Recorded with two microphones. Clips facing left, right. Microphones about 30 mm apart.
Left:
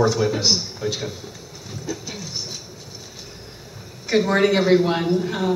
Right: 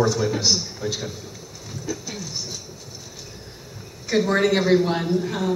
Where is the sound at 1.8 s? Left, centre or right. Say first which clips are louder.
Even; centre.